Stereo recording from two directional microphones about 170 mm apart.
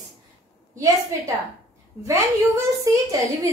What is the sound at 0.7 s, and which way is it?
A woman's voice, 20° right (ahead or behind).